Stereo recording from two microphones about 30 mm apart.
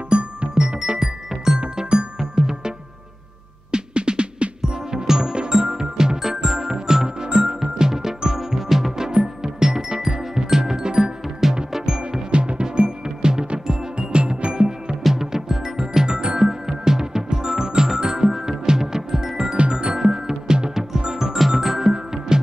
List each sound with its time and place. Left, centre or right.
0.1 s music: right
0.6 s music: right
1.0 s music: centre
1.6 s music: right
3.7 s music: right
12.3 s music: right
15.1 s music: centre
16.4 s music: centre